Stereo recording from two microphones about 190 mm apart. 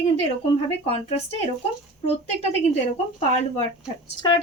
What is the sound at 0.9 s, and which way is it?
A woman's voice, 30° left (ahead or behind).